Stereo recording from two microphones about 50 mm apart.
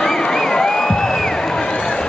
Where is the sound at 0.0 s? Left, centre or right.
Centre.